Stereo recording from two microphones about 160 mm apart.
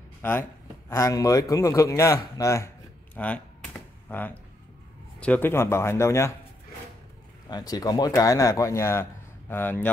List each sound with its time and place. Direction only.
0.2 s speech: 15° left (ahead or behind)
3.2 s a sound: 10° left (ahead or behind)
5.2 s speech: 10° left (ahead or behind)
7.4 s speech: 25° left (ahead or behind)